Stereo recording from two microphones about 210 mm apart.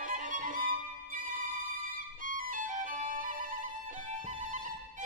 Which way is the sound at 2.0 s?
40° right (ahead or behind).